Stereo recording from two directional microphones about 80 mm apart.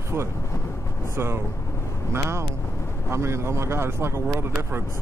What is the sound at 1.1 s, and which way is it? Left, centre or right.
Speech, right.